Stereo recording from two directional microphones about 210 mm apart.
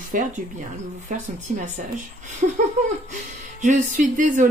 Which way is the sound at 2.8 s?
35° right (ahead or behind).